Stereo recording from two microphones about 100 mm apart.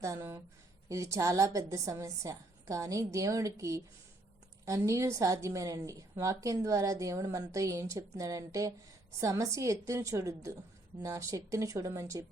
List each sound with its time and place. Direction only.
0.0 s a woman's voice: 30° right (ahead or behind)